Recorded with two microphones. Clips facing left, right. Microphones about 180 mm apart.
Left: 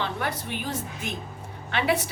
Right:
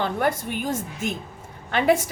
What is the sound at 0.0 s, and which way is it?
A woman's voice, 50° right (ahead or behind).